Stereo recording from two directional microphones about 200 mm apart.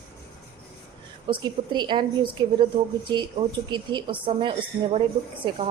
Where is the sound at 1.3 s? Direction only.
25° right (ahead or behind).